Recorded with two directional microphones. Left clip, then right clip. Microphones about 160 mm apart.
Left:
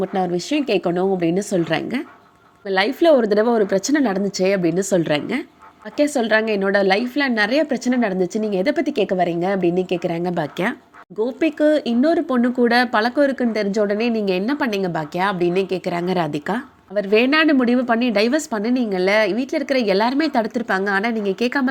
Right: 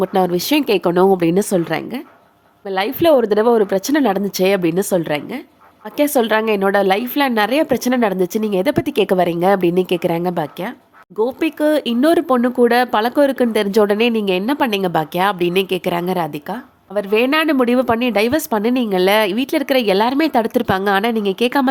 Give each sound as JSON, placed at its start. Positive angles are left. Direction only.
{"t": 0.0, "sound": "a woman's voice", "side_deg": -30}
{"t": 2.6, "sound": "a woman's voice", "side_deg": -10}
{"t": 6.0, "sound": "a woman's voice", "side_deg": -20}
{"t": 16.0, "sound": "a woman's voice", "side_deg": -5}
{"t": 17.4, "sound": "a woman's voice", "side_deg": -25}
{"t": 20.6, "sound": "a woman's voice", "side_deg": -30}